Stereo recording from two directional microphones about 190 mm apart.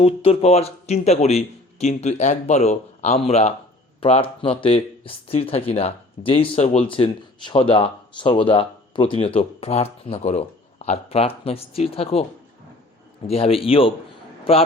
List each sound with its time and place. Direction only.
0.0 s speech: 30° left (ahead or behind)
13.2 s a man's voice: 30° left (ahead or behind)